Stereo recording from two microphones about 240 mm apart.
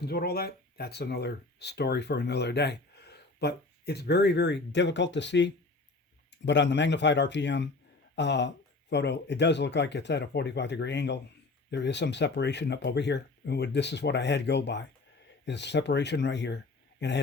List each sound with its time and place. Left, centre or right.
0.0 s speech: left